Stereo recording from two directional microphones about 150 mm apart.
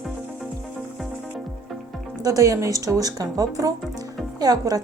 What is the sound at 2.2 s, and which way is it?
Speech, 20° right (ahead or behind).